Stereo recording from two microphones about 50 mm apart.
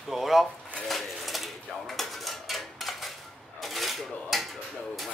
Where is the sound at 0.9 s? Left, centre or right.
Centre.